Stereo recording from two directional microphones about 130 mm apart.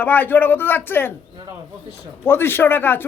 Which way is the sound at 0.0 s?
15° left (ahead or behind).